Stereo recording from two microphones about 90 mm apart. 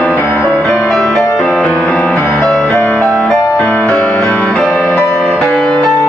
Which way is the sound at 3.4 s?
35° left (ahead or behind).